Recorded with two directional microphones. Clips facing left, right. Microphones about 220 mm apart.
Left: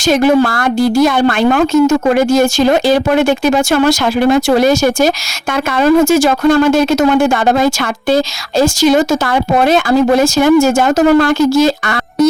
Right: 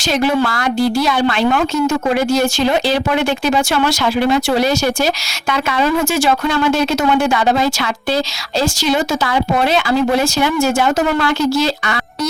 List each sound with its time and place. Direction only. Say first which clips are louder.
0.1 s a woman's voice: left 6 dB; 50° left (ahead or behind)